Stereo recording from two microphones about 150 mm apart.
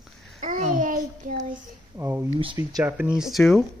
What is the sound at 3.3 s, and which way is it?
Speech, centre (ahead or behind).